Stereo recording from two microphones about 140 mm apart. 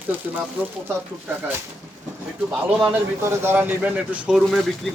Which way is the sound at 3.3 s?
15° right (ahead or behind).